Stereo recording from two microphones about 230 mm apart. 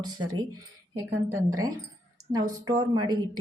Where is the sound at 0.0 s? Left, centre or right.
Centre.